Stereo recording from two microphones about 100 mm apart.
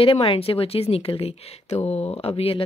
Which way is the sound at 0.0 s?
70° left (ahead or behind).